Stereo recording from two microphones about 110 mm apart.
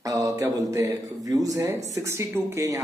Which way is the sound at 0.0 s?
30° right (ahead or behind).